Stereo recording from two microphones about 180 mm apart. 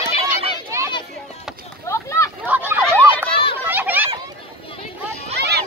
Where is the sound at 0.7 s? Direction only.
15° right (ahead or behind).